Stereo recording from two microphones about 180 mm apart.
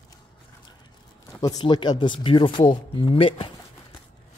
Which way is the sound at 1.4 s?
20° left (ahead or behind).